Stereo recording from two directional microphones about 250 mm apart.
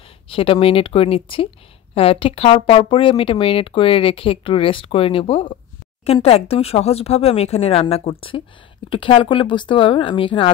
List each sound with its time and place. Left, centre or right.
0.3 s speech: left